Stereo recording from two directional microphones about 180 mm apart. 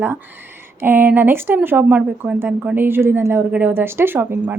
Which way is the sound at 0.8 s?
10° right (ahead or behind).